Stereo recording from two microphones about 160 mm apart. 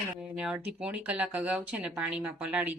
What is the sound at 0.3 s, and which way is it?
Speech, 5° right (ahead or behind).